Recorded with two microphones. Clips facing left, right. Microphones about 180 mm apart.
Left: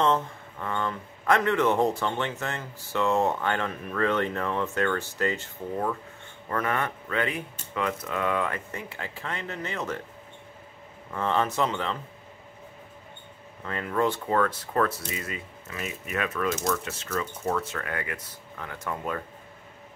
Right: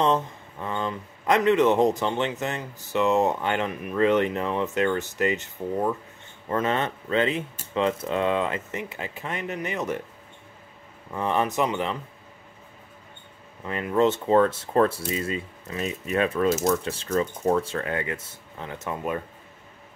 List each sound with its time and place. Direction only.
0.0 s speech: 20° right (ahead or behind)
11.1 s speech: 15° right (ahead or behind)
13.7 s speech: 20° right (ahead or behind)